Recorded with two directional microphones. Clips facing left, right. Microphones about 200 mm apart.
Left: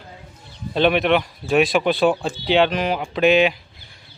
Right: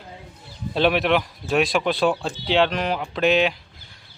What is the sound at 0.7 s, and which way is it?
Speech, centre (ahead or behind).